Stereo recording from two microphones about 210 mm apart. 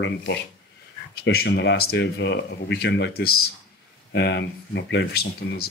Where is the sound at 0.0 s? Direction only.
55° left (ahead or behind).